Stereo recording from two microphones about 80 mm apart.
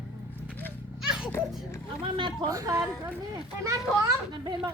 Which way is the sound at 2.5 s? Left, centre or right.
Right.